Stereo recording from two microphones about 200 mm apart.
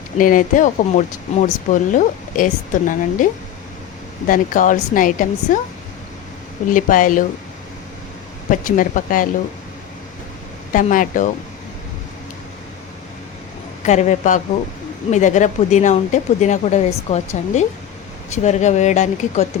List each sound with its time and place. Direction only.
0.2 s speech: 40° left (ahead or behind)
4.3 s speech: 40° left (ahead or behind)
6.7 s speech: 40° left (ahead or behind)
8.4 s speech: 40° left (ahead or behind)
10.7 s speech: 40° left (ahead or behind)
13.8 s speech: 35° left (ahead or behind)